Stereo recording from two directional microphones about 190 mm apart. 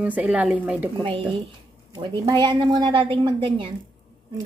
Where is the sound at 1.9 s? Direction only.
20° right (ahead or behind).